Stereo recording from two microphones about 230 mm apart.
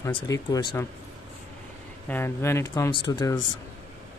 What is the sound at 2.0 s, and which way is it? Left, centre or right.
Speech, centre.